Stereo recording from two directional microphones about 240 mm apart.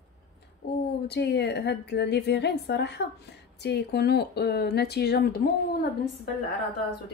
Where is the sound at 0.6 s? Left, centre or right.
Left.